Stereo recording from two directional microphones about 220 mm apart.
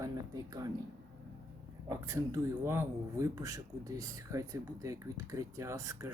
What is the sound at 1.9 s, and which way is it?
Speech, 15° right (ahead or behind).